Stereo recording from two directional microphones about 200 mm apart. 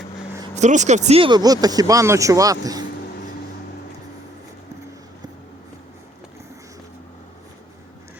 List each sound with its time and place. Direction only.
0.5 s speech: 35° right (ahead or behind); by 2.8 s 15° right (ahead or behind)